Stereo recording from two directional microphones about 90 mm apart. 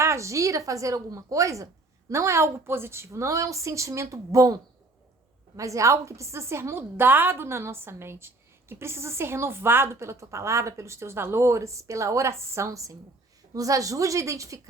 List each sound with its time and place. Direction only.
0.0 s a woman's voice: 35° right (ahead or behind)
5.5 s a woman's voice: 35° right (ahead or behind)